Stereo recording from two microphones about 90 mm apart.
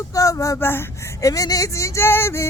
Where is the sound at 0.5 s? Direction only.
25° left (ahead or behind).